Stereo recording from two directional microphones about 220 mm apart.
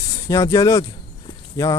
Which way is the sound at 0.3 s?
15° left (ahead or behind).